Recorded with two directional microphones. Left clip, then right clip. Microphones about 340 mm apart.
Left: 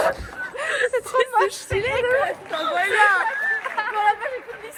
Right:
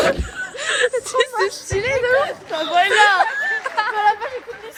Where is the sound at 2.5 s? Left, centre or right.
Right.